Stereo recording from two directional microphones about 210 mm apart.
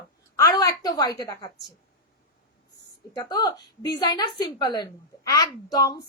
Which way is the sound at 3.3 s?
20° left (ahead or behind).